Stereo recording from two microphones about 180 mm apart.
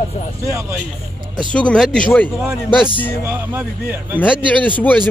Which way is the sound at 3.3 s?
10° right (ahead or behind).